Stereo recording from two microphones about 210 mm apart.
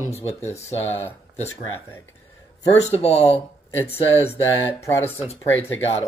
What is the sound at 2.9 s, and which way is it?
Speech, 30° left (ahead or behind).